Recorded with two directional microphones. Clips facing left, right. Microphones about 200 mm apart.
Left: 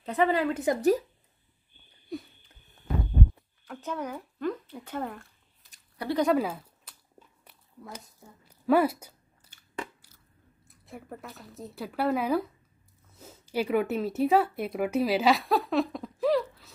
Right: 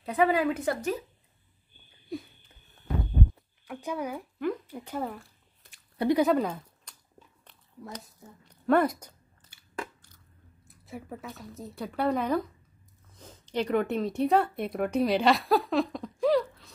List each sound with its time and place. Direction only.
0.0 s a woman's voice: 10° right (ahead or behind)
0.7 s speech: 35° left (ahead or behind)
2.0 s wheeze: centre (ahead or behind)
3.6 s speech: 10° right (ahead or behind); by 7.0 s 5° left (ahead or behind)
7.4 s a sound: 5° left (ahead or behind)
9.5 s biting: 10° right (ahead or behind)
10.7 s speech: centre (ahead or behind)